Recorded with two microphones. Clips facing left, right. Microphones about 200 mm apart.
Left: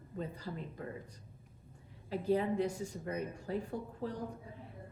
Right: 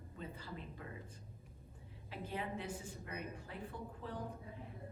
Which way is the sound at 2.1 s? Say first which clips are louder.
Left 11 dB; 40° left (ahead or behind).